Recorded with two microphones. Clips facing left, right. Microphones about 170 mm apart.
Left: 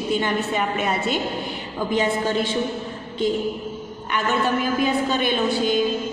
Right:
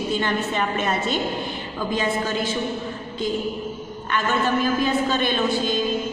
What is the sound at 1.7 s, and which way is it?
Speech, 25° left (ahead or behind).